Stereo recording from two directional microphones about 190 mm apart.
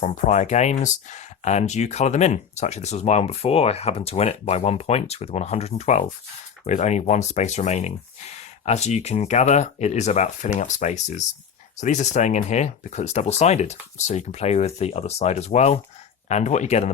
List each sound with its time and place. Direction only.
0.3 s speech: 35° left (ahead or behind)